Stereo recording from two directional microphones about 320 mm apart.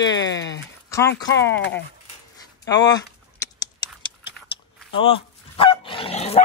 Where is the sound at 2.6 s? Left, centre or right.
Centre.